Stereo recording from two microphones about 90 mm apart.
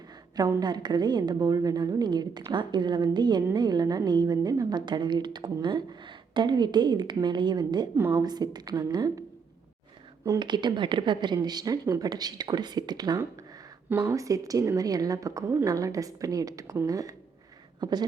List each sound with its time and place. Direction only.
0.3 s a woman's voice: 50° right (ahead or behind)
10.4 s a woman's voice: 55° right (ahead or behind)
11.4 s a woman's voice: 45° right (ahead or behind)
14.1 s a woman's voice: 40° right (ahead or behind)